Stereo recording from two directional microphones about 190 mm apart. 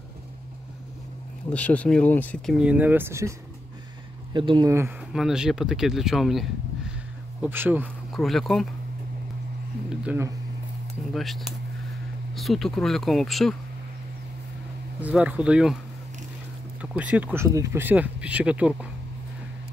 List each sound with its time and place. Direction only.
1.5 s speech: 5° left (ahead or behind); by 3.3 s 15° right (ahead or behind)
4.3 s speech: 25° right (ahead or behind)
5.1 s speech: 5° right (ahead or behind)
7.4 s speech: 10° right (ahead or behind)
8.1 s speech: centre (ahead or behind)
10.0 s speech: 15° right (ahead or behind)
11.1 s speech: centre (ahead or behind)
15.0 s speech: 5° right (ahead or behind)
16.8 s speech: 5° right (ahead or behind)